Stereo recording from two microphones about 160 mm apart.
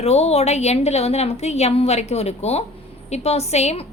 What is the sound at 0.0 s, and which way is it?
A woman's voice, 40° left (ahead or behind).